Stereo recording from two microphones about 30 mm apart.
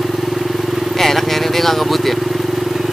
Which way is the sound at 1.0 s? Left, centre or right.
Centre.